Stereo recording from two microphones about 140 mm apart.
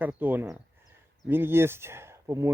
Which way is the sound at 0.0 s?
10° right (ahead or behind).